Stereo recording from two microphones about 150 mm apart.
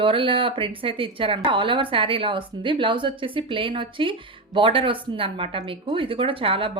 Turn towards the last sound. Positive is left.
turn(degrees=-35)  # may be behind; listen again after turning